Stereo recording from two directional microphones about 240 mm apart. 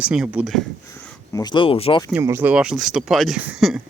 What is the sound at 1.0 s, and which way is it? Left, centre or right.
Speech, centre.